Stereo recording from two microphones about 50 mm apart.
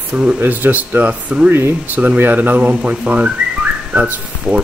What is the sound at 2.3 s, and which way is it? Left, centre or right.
Speech, right.